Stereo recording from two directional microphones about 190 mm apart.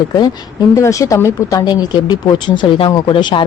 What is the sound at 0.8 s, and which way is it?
Speech, 15° left (ahead or behind).